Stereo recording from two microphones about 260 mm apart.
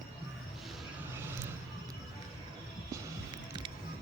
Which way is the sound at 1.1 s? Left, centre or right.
Centre.